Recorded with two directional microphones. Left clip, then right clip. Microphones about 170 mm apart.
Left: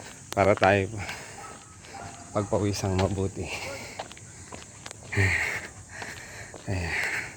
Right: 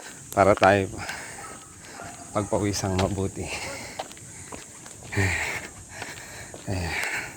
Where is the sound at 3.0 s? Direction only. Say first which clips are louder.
Right 1 dB; 30° left (ahead or behind).